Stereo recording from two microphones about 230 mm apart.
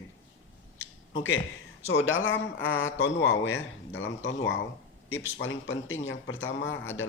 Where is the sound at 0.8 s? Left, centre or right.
Left.